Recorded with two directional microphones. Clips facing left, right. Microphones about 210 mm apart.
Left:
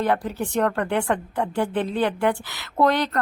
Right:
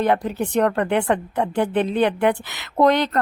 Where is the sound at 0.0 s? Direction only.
20° right (ahead or behind).